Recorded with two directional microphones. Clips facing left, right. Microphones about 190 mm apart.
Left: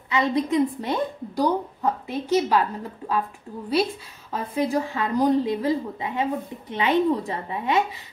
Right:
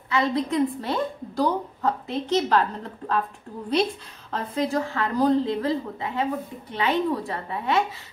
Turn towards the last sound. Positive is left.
turn(degrees=15)  # may be behind; listen again after turning